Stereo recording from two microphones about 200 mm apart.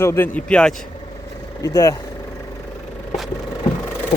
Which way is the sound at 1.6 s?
15° left (ahead or behind).